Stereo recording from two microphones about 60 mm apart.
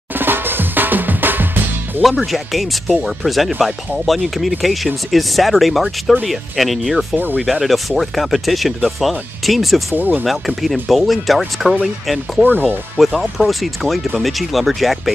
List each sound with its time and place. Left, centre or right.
0.2 s drum: right
2.3 s speech: centre
9.9 s speech: right
10.2 s speech: centre